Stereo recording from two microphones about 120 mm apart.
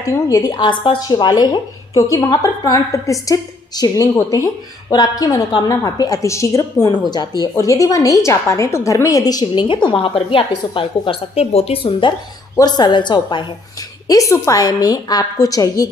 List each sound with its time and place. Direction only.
0.0 s a woman's voice: 30° left (ahead or behind); by 12.1 s 50° left (ahead or behind)
12.5 s a woman's voice: 35° left (ahead or behind)
14.0 s a woman's voice: 30° left (ahead or behind)